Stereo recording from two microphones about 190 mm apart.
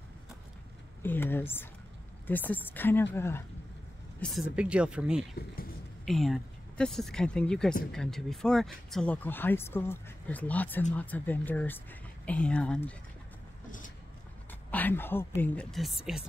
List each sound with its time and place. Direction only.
1.0 s speech: 10° left (ahead or behind)
4.2 s speech: centre (ahead or behind)
13.7 s a sound: 45° left (ahead or behind)
14.5 s speech: 10° left (ahead or behind)